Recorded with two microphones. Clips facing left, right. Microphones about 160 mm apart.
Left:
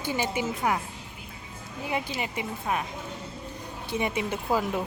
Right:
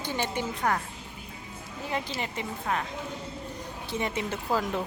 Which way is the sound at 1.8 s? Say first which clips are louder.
Left 2 dB; 15° left (ahead or behind).